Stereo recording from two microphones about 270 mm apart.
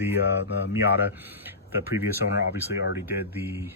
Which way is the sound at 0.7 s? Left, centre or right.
Centre.